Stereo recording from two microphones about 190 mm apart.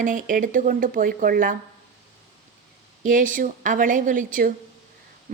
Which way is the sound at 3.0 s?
45° right (ahead or behind).